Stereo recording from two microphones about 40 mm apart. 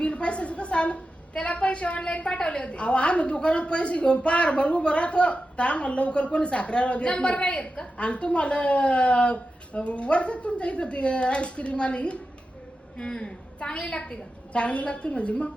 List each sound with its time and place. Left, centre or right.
0.0 s a woman's voice: left